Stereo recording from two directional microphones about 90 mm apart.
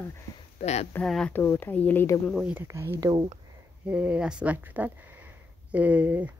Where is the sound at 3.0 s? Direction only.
50° right (ahead or behind).